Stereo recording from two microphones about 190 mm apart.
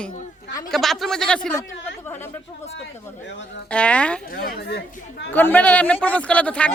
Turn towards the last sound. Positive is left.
turn(degrees=5)  # may be behind; listen again after turning